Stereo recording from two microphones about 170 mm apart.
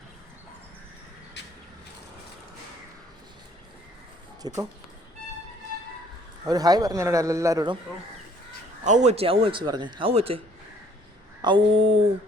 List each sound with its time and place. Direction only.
4.4 s a man's voice: 25° right (ahead or behind)
6.4 s a man's voice: 20° right (ahead or behind)
8.8 s speech: 45° right (ahead or behind)
11.4 s speech: 30° right (ahead or behind)